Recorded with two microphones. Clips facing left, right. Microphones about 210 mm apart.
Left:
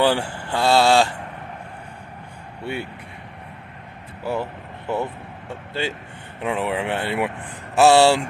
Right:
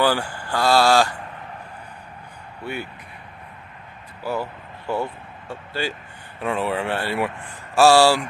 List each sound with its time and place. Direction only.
0.0 s speech: 25° left (ahead or behind)
2.6 s speech: 30° left (ahead or behind)
4.2 s vehicle: 25° left (ahead or behind)
5.7 s speech: 20° left (ahead or behind)